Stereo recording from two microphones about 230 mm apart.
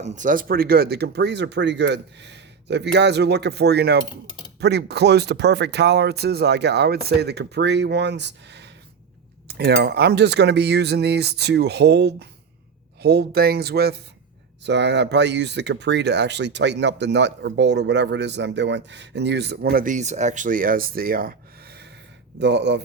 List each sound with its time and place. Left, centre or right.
0.0 s speech: right